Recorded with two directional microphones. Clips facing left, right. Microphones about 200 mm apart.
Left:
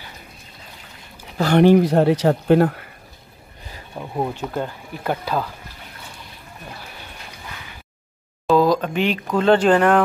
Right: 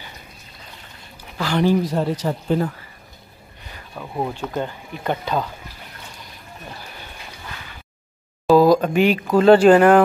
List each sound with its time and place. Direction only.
1.4 s speech: 60° left (ahead or behind)
3.7 s a sound: 20° left (ahead or behind)
4.1 s speech: 10° left (ahead or behind)
8.5 s speech: 10° right (ahead or behind)